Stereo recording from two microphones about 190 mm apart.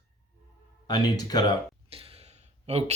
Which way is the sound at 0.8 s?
20° left (ahead or behind).